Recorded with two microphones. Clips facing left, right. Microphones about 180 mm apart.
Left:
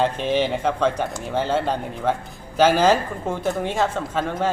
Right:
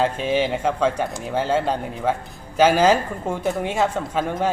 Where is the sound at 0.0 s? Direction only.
5° right (ahead or behind).